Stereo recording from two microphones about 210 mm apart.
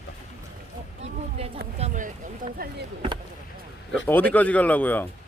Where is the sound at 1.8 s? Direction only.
40° right (ahead or behind).